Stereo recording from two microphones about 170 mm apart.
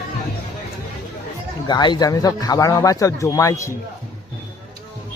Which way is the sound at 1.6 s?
25° left (ahead or behind).